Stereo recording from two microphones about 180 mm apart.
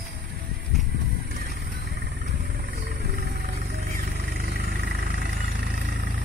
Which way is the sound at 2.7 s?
55° right (ahead or behind).